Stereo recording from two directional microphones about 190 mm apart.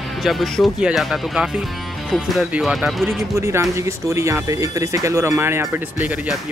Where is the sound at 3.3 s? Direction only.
15° right (ahead or behind).